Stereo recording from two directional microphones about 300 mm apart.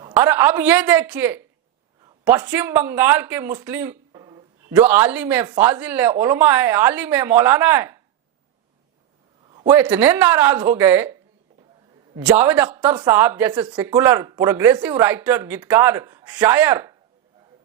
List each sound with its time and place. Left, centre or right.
0.1 s a woman's voice: centre
9.5 s speech: centre